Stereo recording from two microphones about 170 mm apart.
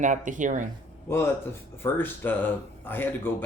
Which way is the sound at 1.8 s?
10° left (ahead or behind).